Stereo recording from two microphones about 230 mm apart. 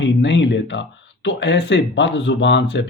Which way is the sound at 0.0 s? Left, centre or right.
Left.